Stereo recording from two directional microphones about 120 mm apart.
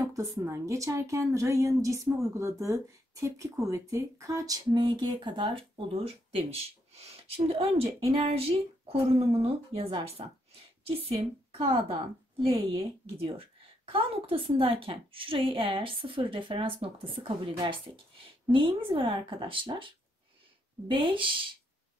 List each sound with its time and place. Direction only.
0.0 s a woman's voice: 25° right (ahead or behind); by 19.9 s 45° right (ahead or behind)
20.9 s a woman's voice: 45° right (ahead or behind)